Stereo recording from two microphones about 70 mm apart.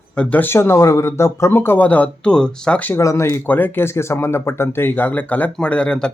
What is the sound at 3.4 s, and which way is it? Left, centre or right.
Speech, left.